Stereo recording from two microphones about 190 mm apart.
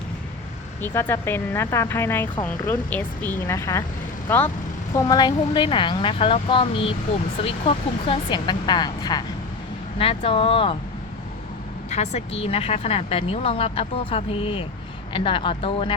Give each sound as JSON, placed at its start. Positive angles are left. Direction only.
{"t": 0.8, "sound": "speech", "side_deg": 10}
{"t": 4.9, "sound": "speech", "side_deg": 20}
{"t": 11.9, "sound": "speech", "side_deg": 35}